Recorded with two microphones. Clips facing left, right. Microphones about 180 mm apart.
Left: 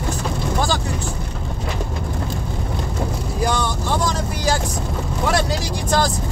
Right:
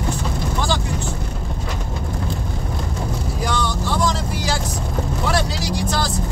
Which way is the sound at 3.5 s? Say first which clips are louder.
Even; 45° left (ahead or behind).